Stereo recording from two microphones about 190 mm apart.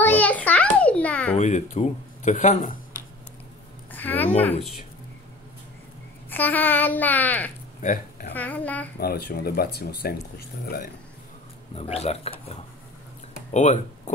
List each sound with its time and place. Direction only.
0.0 s a sound: 10° left (ahead or behind)
1.3 s speech: 40° left (ahead or behind)
3.9 s a woman's voice: 10° left (ahead or behind)
6.3 s speech: 10° left (ahead or behind)
7.8 s speech: 45° left (ahead or behind)
8.3 s speech: 10° left (ahead or behind)
9.0 s speech: 55° left (ahead or behind)
11.7 s speech: 35° left (ahead or behind)